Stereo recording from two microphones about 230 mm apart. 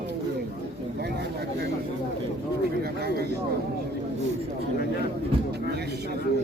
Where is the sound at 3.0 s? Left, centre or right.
Right.